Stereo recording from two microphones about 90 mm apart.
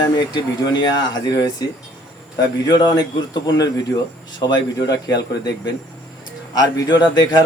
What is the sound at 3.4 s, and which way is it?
Speech, 50° left (ahead or behind).